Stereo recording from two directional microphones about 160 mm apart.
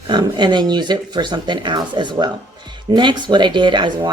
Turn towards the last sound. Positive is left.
turn(degrees=-30)  # may be behind; listen again after turning